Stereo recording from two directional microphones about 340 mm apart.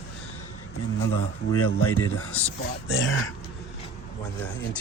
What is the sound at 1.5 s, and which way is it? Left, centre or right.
Speech, left.